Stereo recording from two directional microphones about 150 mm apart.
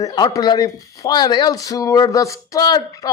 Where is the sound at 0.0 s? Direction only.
25° left (ahead or behind).